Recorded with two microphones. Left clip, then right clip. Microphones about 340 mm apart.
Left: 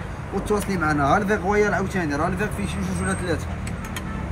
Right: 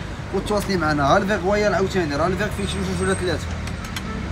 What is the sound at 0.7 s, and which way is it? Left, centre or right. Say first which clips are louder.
Speech: right 3 dB; centre.